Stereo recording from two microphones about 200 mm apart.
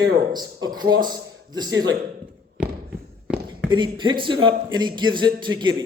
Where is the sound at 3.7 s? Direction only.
25° right (ahead or behind).